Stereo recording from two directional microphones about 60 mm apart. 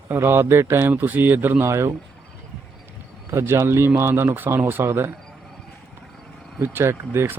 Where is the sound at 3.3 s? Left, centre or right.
Right.